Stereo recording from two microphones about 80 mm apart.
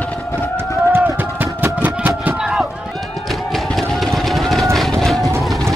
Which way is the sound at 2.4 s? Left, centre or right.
Centre.